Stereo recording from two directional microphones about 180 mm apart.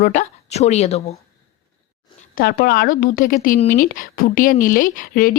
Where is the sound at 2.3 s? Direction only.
55° left (ahead or behind).